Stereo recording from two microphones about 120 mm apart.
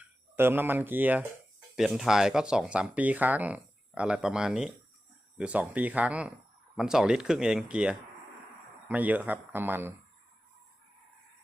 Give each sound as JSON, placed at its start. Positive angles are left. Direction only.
{"t": 0.0, "sound": "speech", "side_deg": -20}
{"t": 1.7, "sound": "speech", "side_deg": -5}